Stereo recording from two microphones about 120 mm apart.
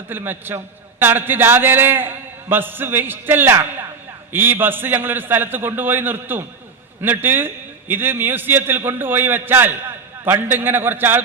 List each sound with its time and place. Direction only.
0.1 s a man's voice: 15° right (ahead or behind)